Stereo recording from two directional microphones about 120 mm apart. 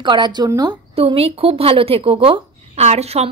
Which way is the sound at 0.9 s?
55° right (ahead or behind).